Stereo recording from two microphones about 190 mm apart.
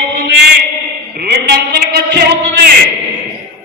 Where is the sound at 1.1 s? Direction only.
55° right (ahead or behind).